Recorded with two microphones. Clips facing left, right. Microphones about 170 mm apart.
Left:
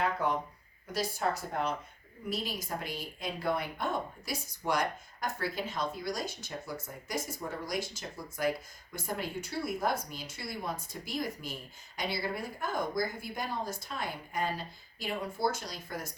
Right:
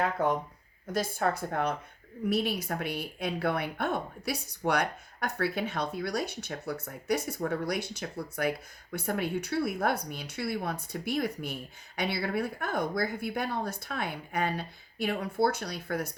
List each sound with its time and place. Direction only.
0.9 s speech: 55° right (ahead or behind)